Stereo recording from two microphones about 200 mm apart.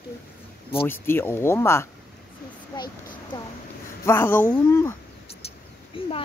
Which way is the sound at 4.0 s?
10° left (ahead or behind).